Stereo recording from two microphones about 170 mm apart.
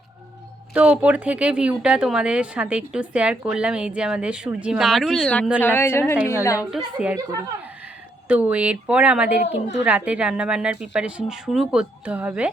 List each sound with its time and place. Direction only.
0.7 s a woman's voice: 10° right (ahead or behind); by 6.6 s 15° left (ahead or behind)
6.6 s a woman's voice: 5° right (ahead or behind)
8.3 s a woman's voice: 10° right (ahead or behind)